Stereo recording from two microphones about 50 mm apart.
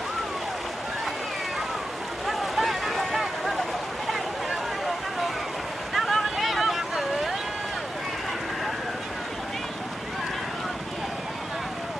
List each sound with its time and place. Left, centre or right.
2.2 s vehicle: centre
5.9 s boat: centre
6.3 s vehicle: centre